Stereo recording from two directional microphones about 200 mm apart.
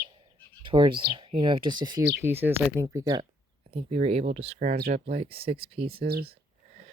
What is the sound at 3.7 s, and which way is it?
Speech, 30° right (ahead or behind).